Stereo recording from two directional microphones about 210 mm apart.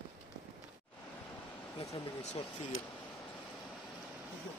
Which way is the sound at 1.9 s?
30° left (ahead or behind).